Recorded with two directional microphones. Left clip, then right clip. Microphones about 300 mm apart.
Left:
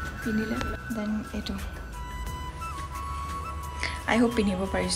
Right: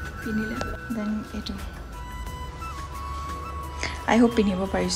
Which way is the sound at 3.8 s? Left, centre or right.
Centre.